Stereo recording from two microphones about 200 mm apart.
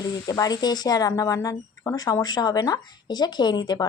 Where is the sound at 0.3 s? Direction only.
20° left (ahead or behind).